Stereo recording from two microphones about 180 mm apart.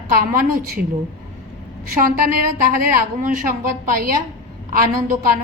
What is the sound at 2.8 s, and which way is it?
Speech, 50° right (ahead or behind).